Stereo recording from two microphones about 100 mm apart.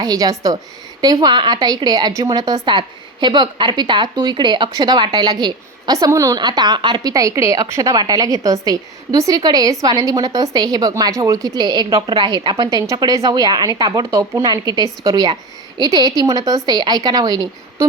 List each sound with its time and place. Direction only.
0.0 s a woman's voice: 40° right (ahead or behind)
7.1 s a woman's voice: 35° right (ahead or behind)
12.9 s a woman's voice: 35° right (ahead or behind)